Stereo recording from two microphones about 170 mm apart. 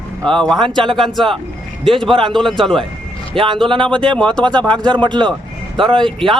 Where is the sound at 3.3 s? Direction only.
30° right (ahead or behind).